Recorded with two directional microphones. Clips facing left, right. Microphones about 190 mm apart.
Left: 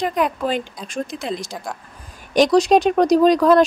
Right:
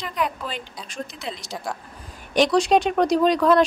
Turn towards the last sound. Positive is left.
turn(degrees=40)  # may be behind; listen again after turning